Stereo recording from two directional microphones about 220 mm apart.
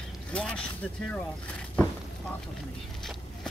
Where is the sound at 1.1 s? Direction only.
5° left (ahead or behind).